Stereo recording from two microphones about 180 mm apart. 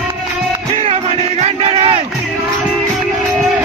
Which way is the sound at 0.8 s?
35° right (ahead or behind).